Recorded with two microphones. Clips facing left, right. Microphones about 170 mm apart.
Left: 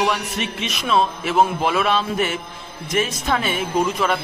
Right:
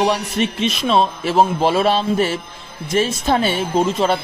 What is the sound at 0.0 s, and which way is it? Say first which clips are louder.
A man's voice: right 4 dB; 30° right (ahead or behind).